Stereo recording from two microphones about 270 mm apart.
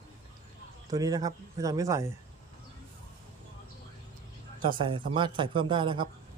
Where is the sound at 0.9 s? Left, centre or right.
Centre.